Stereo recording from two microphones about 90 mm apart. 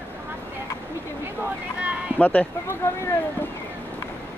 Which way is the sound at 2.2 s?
20° left (ahead or behind).